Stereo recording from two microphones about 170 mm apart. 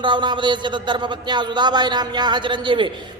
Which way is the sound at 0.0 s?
25° right (ahead or behind).